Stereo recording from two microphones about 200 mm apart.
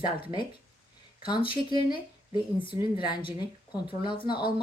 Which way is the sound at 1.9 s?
25° left (ahead or behind).